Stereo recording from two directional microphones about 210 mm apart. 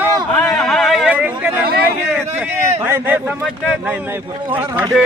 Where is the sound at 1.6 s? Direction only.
45° right (ahead or behind).